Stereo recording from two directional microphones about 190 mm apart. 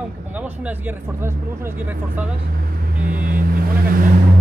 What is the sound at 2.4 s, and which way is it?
Vehicle, 50° right (ahead or behind).